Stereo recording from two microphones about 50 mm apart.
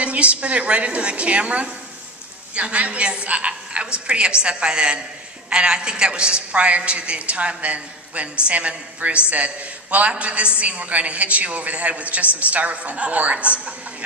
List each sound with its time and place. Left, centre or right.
0.0 s a man's voice: right